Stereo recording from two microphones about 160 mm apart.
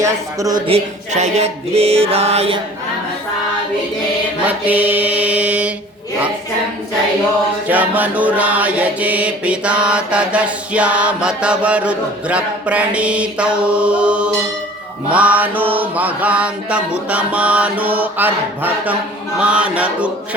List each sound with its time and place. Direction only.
0.0 s speech: 20° right (ahead or behind)
0.6 s mantra: 40° right (ahead or behind)
4.4 s mantra: 10° right (ahead or behind)
7.7 s mantra: 10° right (ahead or behind)